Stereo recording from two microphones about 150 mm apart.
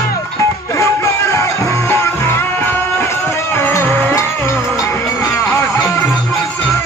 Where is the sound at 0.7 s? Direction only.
20° left (ahead or behind).